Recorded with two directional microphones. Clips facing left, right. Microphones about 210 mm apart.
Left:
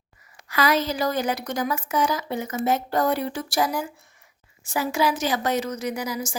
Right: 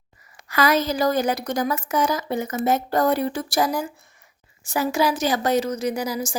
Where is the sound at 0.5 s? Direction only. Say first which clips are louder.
Right 2 dB; 45° right (ahead or behind).